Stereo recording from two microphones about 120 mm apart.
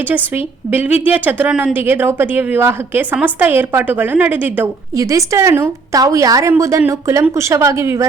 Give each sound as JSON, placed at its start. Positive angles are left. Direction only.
{"t": 0.1, "sound": "a woman's voice", "side_deg": -15}
{"t": 4.9, "sound": "a woman's voice", "side_deg": -25}